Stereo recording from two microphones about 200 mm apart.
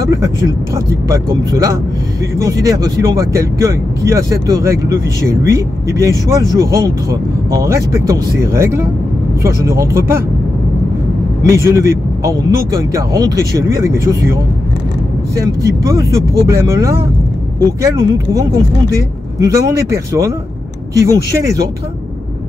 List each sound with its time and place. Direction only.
1.0 s speech: 15° right (ahead or behind)
11.4 s speech: 15° right (ahead or behind)
15.4 s speech: 15° right (ahead or behind)